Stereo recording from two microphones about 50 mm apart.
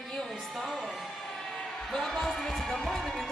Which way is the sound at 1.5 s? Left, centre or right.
Centre.